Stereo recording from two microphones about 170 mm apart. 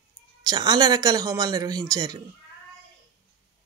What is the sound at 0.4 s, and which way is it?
Speech, 25° right (ahead or behind).